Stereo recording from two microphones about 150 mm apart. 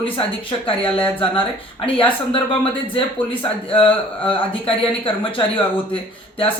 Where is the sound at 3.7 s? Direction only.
35° left (ahead or behind).